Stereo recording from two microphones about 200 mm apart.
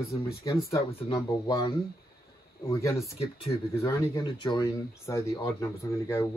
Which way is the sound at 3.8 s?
15° left (ahead or behind).